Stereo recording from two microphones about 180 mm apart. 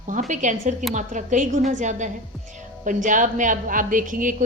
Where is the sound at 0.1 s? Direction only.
45° right (ahead or behind).